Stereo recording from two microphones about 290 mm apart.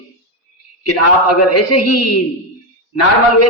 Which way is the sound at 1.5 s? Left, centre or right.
Left.